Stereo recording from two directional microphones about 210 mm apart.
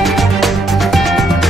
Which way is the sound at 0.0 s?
Centre (ahead or behind).